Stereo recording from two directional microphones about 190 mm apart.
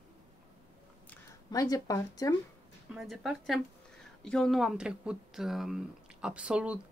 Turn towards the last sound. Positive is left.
turn(degrees=-5)  # may be behind; listen again after turning